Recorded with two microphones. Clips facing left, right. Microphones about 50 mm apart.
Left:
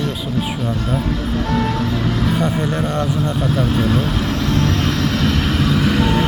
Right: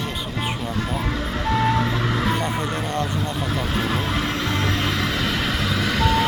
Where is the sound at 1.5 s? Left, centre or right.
Right.